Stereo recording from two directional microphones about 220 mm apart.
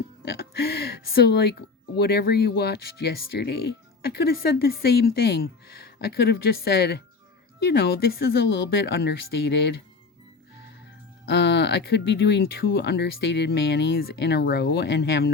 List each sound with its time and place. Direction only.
0.3 s speech: 45° left (ahead or behind)
11.3 s speech: 50° left (ahead or behind)